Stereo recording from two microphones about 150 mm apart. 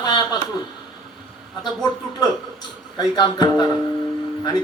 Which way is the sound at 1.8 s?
30° left (ahead or behind).